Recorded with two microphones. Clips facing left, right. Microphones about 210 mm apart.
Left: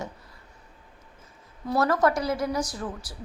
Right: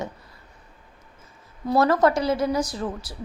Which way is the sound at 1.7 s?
25° right (ahead or behind).